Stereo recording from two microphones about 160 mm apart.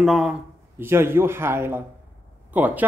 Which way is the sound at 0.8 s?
15° right (ahead or behind).